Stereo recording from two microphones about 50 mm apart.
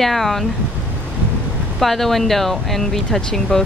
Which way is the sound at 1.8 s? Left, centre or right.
Centre.